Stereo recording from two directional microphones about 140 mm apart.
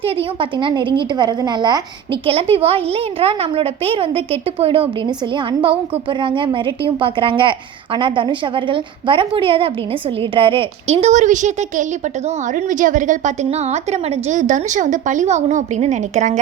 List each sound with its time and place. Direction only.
0.0 s a woman's voice: 40° right (ahead or behind)
2.2 s a woman's voice: 40° right (ahead or behind)
10.9 s a woman's voice: 55° right (ahead or behind)